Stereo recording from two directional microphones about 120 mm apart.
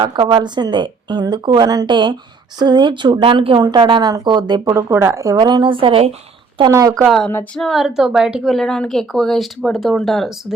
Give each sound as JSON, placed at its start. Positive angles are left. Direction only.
{"t": 0.0, "sound": "a woman's voice", "side_deg": -40}
{"t": 4.7, "sound": "speech", "side_deg": -25}
{"t": 5.4, "sound": "speech", "side_deg": -40}
{"t": 6.7, "sound": "speech", "side_deg": -30}
{"t": 7.0, "sound": "a woman's voice", "side_deg": 0}